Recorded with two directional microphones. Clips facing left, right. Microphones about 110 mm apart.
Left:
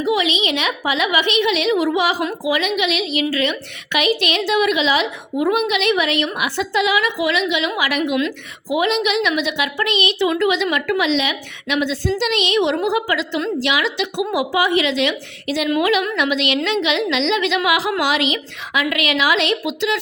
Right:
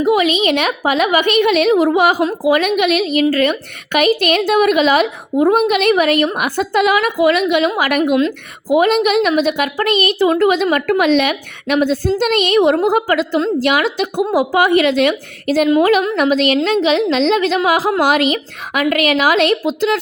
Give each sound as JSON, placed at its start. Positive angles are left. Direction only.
{"t": 0.0, "sound": "a woman's voice", "side_deg": -45}